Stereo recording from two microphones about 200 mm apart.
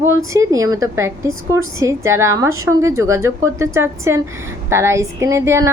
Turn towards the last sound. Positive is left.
turn(degrees=-15)  # may be behind; listen again after turning